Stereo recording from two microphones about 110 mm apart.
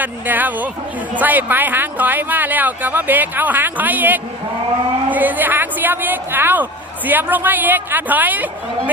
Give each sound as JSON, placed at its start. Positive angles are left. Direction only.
{"t": 0.0, "sound": "a woman's voice", "side_deg": -15}